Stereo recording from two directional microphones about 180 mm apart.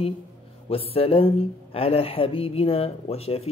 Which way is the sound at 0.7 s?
30° left (ahead or behind).